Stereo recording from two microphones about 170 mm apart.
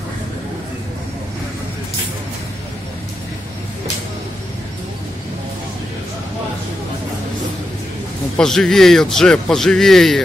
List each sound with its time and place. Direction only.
8.4 s speech: centre (ahead or behind)